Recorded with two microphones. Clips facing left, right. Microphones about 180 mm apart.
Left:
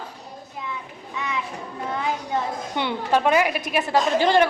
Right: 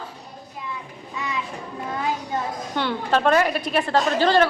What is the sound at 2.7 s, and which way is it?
A woman's voice, 15° left (ahead or behind).